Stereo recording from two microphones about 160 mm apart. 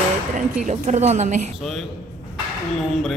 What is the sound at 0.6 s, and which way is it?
Speech, 45° right (ahead or behind).